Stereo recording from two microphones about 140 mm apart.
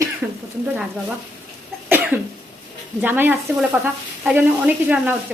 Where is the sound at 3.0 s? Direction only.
15° right (ahead or behind).